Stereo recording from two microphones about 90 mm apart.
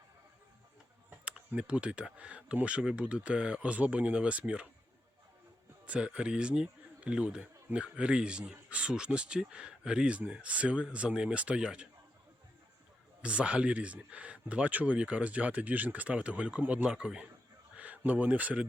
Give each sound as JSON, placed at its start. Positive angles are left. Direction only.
{"t": 1.2, "sound": "speech", "side_deg": -10}
{"t": 5.8, "sound": "speech", "side_deg": -15}
{"t": 13.2, "sound": "speech", "side_deg": -15}